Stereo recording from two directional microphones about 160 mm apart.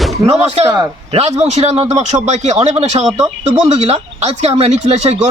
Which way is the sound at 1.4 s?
45° right (ahead or behind).